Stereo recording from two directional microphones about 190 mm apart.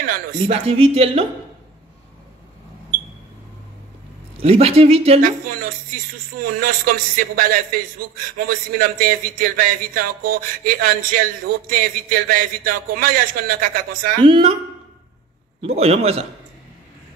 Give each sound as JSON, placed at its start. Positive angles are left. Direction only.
{"t": 0.5, "sound": "speech", "side_deg": -30}
{"t": 4.4, "sound": "speech", "side_deg": -30}
{"t": 5.2, "sound": "speech", "side_deg": -50}
{"t": 14.2, "sound": "a woman's voice", "side_deg": -30}
{"t": 15.6, "sound": "speech", "side_deg": -30}